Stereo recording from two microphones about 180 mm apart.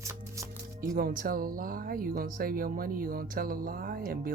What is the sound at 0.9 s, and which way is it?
Speech, 50° right (ahead or behind).